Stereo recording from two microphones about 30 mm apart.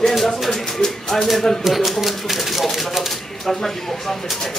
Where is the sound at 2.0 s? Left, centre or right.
Centre.